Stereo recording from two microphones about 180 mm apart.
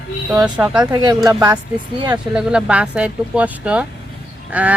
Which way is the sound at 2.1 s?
5° right (ahead or behind).